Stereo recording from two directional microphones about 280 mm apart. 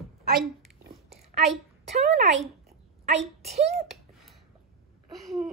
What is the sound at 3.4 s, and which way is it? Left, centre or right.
Speech, right.